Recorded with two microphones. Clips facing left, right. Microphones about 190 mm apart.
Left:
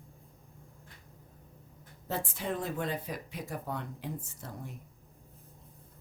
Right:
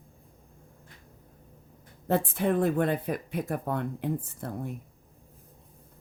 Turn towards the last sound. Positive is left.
turn(degrees=-55)  # may be behind; listen again after turning